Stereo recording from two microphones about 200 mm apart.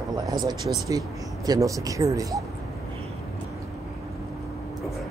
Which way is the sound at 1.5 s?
15° right (ahead or behind).